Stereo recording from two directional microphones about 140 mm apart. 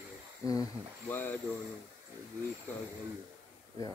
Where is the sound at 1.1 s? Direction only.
15° left (ahead or behind).